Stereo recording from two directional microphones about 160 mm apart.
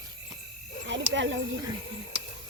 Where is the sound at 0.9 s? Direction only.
90° right.